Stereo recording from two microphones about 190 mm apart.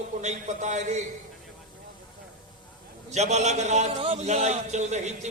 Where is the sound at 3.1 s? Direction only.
35° right (ahead or behind).